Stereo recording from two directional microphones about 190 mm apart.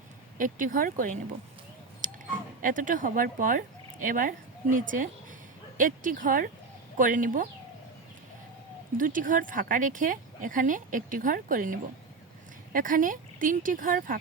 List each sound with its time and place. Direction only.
0.3 s speech: 45° right (ahead or behind)
2.0 s a sound: 45° right (ahead or behind)
2.6 s speech: 45° right (ahead or behind)
9.0 s speech: 45° right (ahead or behind)